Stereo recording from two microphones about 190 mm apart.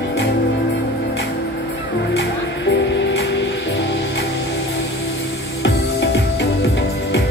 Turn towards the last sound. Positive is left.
turn(degrees=65)  # may be behind; listen again after turning